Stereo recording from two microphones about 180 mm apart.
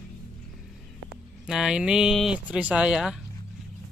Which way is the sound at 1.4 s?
5° right (ahead or behind).